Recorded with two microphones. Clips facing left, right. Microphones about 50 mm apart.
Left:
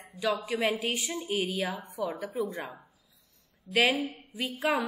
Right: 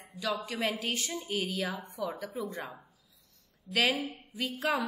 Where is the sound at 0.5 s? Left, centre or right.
Centre.